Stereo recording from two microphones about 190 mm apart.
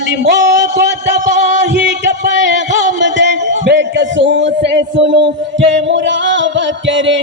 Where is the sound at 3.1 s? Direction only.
70° right (ahead or behind).